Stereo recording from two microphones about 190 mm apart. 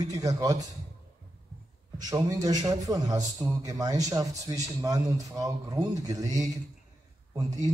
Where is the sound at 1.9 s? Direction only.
20° right (ahead or behind).